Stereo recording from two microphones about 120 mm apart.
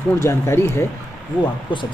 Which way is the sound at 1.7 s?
40° left (ahead or behind).